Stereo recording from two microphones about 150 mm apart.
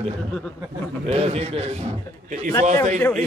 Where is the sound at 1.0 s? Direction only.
40° right (ahead or behind).